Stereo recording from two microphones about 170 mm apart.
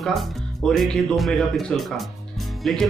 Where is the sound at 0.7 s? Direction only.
5° left (ahead or behind).